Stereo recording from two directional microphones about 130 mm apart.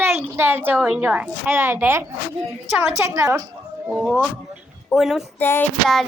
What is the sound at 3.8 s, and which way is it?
A woman's voice, centre (ahead or behind).